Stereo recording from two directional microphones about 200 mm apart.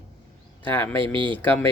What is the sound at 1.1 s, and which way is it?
Speech, 25° right (ahead or behind).